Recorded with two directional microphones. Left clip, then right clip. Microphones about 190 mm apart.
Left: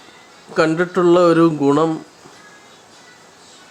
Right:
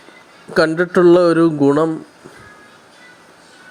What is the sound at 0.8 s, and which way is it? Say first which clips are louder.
Speech: right 3 dB; 20° right (ahead or behind).